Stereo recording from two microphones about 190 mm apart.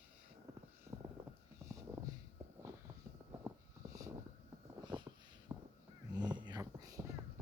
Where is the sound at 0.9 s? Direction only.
25° right (ahead or behind).